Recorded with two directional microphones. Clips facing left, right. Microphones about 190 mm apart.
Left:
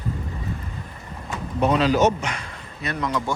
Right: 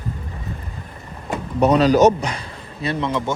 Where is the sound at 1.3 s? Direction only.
40° right (ahead or behind).